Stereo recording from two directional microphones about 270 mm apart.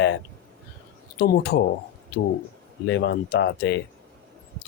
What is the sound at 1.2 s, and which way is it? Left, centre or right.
Speech, left.